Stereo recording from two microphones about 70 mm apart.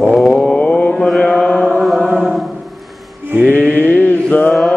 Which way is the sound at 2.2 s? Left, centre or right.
Centre.